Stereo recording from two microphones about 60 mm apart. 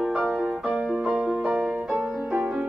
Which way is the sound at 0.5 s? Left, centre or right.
Centre.